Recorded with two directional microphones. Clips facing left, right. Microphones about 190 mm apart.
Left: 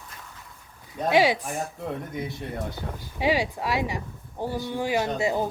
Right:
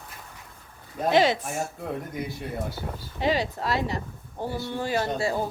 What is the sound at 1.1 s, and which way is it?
Speech, 10° left (ahead or behind).